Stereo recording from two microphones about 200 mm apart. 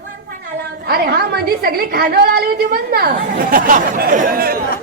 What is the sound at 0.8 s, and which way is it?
A woman's voice, 50° right (ahead or behind).